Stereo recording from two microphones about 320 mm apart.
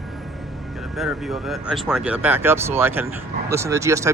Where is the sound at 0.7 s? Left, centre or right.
Centre.